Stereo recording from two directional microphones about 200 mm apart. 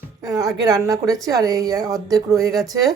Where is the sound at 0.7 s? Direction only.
20° right (ahead or behind).